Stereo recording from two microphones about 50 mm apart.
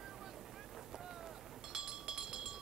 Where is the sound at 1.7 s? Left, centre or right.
Centre.